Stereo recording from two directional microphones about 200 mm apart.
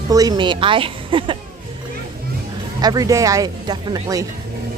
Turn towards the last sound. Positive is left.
turn(degrees=-20)  # may be behind; listen again after turning